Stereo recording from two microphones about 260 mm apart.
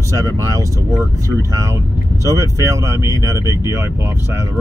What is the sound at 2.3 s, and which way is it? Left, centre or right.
Speech, centre.